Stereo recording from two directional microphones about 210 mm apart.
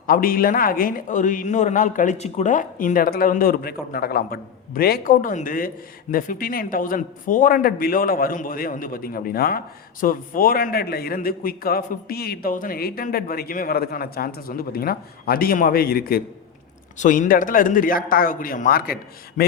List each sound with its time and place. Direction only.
0.1 s a man's voice: 45° left (ahead or behind)